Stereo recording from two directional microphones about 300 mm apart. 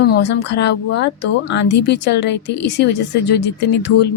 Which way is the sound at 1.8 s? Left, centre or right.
Left.